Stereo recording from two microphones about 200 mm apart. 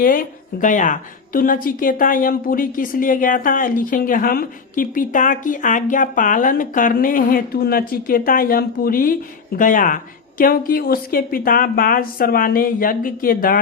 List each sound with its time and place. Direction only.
0.0 s a woman's voice: 45° left (ahead or behind)